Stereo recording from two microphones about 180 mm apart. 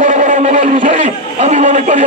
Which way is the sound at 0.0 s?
45° right (ahead or behind).